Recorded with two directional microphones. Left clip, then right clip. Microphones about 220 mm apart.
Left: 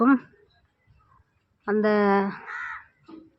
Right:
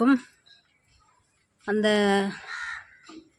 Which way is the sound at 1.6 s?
5° right (ahead or behind).